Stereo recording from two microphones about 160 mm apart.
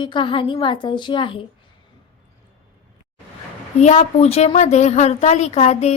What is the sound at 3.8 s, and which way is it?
A woman's voice, 45° left (ahead or behind).